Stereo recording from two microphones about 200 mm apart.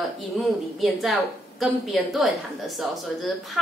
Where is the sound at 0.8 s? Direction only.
Centre (ahead or behind).